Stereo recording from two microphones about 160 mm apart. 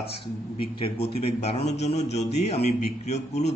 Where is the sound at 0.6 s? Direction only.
35° left (ahead or behind).